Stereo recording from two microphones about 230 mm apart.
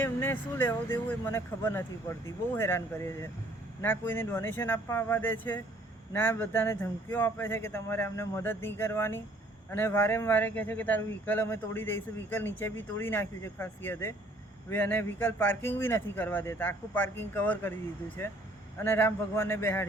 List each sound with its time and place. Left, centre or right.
0.0 s speech: centre
18.8 s speech: centre